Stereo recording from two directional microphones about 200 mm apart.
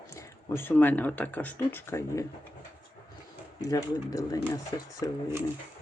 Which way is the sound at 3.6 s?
15° left (ahead or behind).